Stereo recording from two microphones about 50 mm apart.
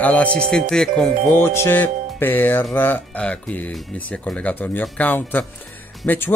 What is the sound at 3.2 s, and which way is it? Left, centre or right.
Speech, left.